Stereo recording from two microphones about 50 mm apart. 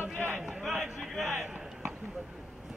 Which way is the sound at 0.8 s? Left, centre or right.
Centre.